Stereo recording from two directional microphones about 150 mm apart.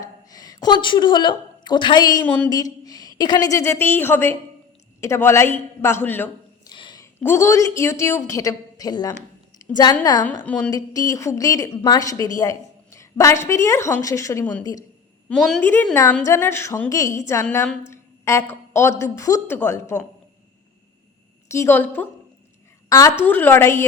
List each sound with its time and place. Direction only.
0.0 s a woman's voice: 25° left (ahead or behind)
2.2 s a woman's voice: 10° left (ahead or behind)
2.8 s a woman's voice: 25° left (ahead or behind)
6.7 s a sound: 30° left (ahead or behind)
7.2 s a woman's voice: 15° left (ahead or behind)
10.4 s a woman's voice: 10° left (ahead or behind)
10.7 s a woman's voice: 25° left (ahead or behind)
15.3 s a woman's voice: centre (ahead or behind)
21.5 s a woman's voice: 15° left (ahead or behind)
22.9 s a woman's voice: 20° left (ahead or behind)
23.2 s a woman's voice: 10° left (ahead or behind)